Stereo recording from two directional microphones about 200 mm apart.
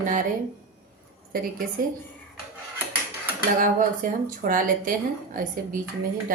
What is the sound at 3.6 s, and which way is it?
A woman's voice, 45° right (ahead or behind).